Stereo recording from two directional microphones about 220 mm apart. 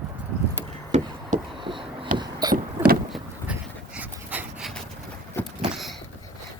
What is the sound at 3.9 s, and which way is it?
Dog, 5° right (ahead or behind).